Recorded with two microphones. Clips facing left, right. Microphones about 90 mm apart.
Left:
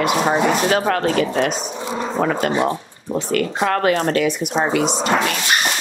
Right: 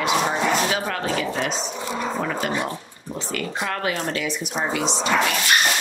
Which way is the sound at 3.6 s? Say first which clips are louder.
Left 9 dB; 55° left (ahead or behind).